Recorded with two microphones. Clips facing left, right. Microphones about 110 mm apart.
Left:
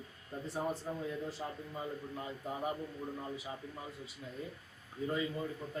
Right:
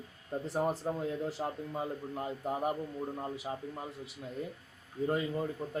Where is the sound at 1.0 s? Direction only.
70° right (ahead or behind).